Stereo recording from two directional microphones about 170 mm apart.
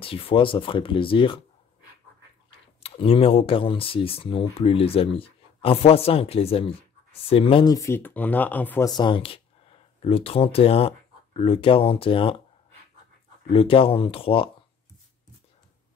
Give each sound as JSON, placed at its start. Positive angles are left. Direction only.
{"t": 0.0, "sound": "speech", "side_deg": 30}
{"t": 2.8, "sound": "speech", "side_deg": 35}
{"t": 8.8, "sound": "speech", "side_deg": 25}
{"t": 13.5, "sound": "speech", "side_deg": 35}